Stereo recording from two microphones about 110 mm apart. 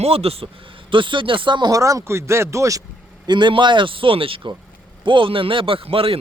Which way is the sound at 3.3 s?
45° right (ahead or behind).